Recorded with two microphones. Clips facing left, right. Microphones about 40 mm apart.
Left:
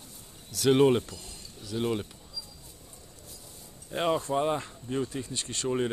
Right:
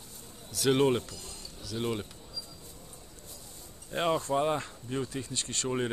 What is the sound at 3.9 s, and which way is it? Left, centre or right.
Speech, centre.